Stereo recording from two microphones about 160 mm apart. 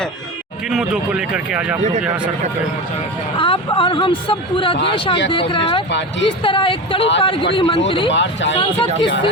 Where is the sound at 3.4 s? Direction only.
30° left (ahead or behind).